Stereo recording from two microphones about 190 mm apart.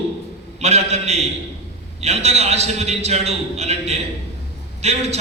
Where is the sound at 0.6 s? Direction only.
35° right (ahead or behind).